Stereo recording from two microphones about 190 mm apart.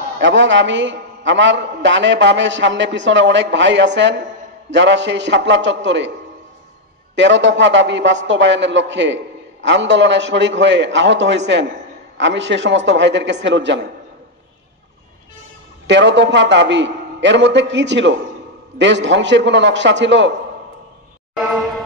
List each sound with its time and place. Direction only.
0.2 s a man's voice: 75° right (ahead or behind)
7.2 s a man's voice: 70° right (ahead or behind)
15.9 s a man's voice: 70° right (ahead or behind)
21.4 s music: centre (ahead or behind)